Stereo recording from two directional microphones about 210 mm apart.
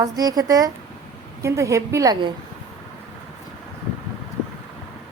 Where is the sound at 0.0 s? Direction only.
15° right (ahead or behind).